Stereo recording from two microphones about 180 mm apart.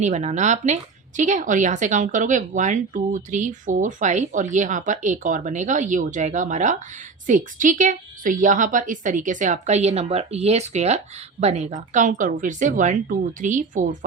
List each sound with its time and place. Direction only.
0.0 s a woman's voice: 40° right (ahead or behind)